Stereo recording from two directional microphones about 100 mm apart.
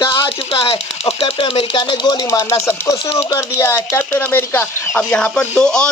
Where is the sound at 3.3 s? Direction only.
30° left (ahead or behind).